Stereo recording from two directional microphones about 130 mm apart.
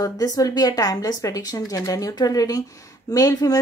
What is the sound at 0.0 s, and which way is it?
Speech, 30° left (ahead or behind).